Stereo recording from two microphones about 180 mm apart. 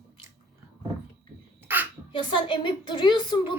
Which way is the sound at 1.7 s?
10° right (ahead or behind).